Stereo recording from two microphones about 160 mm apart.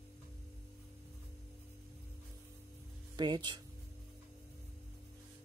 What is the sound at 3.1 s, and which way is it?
Speech, 25° right (ahead or behind).